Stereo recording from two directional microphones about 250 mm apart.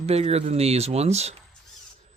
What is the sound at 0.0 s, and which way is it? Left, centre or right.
Speech, right.